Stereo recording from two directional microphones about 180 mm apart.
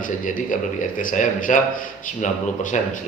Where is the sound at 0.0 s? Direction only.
45° left (ahead or behind).